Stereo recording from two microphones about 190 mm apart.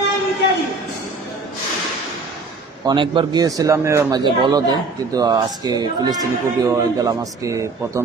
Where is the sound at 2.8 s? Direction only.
25° right (ahead or behind).